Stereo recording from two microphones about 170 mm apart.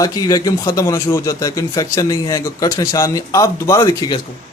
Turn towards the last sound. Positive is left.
turn(degrees=25)  # may be behind; listen again after turning